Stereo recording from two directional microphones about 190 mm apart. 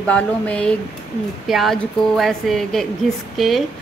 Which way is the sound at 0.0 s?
5° left (ahead or behind).